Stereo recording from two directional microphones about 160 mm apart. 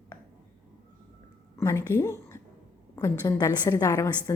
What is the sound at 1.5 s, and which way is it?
A woman's voice, 15° left (ahead or behind).